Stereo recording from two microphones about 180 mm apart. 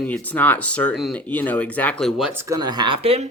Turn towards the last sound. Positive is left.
turn(degrees=-35)  # may be behind; listen again after turning